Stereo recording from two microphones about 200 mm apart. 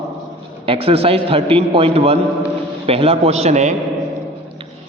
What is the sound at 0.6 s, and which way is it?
A man's voice, 30° right (ahead or behind).